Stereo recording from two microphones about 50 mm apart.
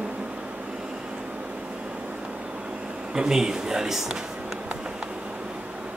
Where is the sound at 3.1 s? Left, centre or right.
Centre.